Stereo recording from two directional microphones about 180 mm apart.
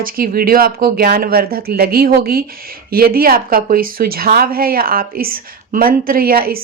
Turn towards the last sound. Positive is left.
turn(degrees=-55)  # may be behind; listen again after turning